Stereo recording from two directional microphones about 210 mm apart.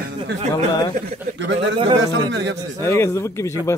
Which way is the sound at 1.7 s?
25° right (ahead or behind).